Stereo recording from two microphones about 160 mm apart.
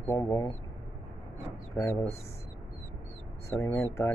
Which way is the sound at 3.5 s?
15° left (ahead or behind).